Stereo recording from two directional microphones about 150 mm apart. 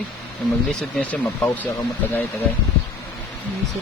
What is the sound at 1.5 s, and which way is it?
Speech, 20° left (ahead or behind).